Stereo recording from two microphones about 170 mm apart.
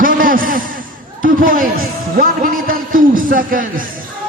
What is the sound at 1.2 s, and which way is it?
Music, 55° right (ahead or behind).